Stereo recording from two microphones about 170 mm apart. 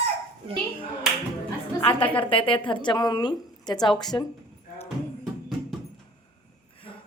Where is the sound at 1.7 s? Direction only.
30° left (ahead or behind).